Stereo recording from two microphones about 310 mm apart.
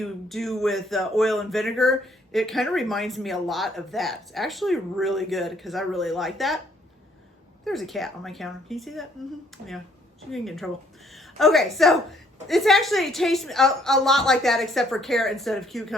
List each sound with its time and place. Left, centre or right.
0.0 s speech: centre
7.6 s speech: centre
10.3 s a woman's voice: centre